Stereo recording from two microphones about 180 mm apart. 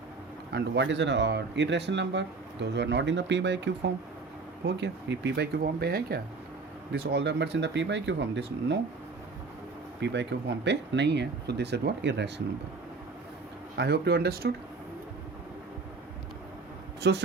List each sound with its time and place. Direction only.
0.5 s speech: 80° right
10.0 s speech: 75° right (ahead or behind)
13.7 s speech: 65° right (ahead or behind)
17.0 s speech: 70° right (ahead or behind)